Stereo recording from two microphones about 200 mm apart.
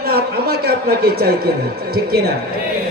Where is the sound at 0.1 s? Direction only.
50° right (ahead or behind).